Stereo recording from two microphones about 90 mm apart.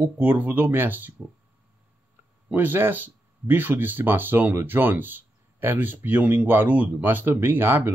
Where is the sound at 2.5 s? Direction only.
20° right (ahead or behind).